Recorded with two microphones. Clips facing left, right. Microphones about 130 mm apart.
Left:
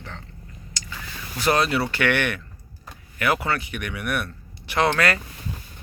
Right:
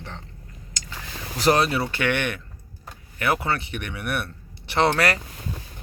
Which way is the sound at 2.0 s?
20° right (ahead or behind).